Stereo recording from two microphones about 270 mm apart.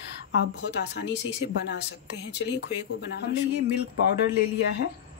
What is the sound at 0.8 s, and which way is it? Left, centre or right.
Speech, left.